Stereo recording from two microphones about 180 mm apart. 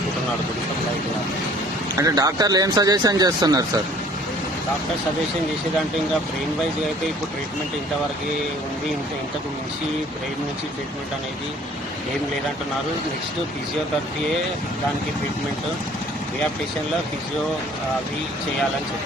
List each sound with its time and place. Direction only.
2.0 s speech: 20° right (ahead or behind)